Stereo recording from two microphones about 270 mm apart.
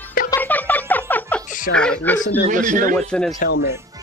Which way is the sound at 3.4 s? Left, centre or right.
Left.